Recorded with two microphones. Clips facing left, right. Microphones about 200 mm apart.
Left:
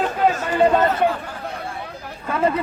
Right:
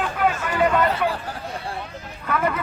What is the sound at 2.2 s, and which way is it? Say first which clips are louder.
Speech: left 3 dB; 25° left (ahead or behind).